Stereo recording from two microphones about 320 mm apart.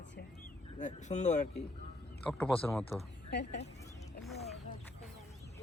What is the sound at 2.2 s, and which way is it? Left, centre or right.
Speech, centre.